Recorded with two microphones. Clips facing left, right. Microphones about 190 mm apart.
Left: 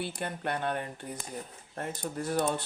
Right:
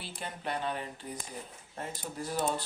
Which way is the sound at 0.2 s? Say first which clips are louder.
Right 1 dB; 55° left (ahead or behind).